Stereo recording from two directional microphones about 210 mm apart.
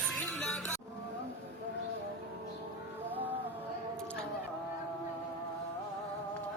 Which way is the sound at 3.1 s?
10° right (ahead or behind).